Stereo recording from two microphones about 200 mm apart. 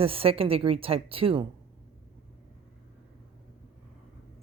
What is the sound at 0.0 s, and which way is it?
A woman's voice, 30° right (ahead or behind).